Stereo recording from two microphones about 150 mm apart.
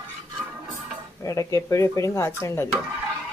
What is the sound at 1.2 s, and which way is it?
Speech, 20° left (ahead or behind).